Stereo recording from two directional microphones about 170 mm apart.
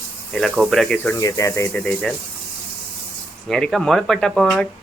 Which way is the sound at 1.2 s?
20° left (ahead or behind).